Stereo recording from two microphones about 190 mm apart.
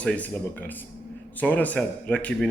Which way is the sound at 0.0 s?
5° left (ahead or behind).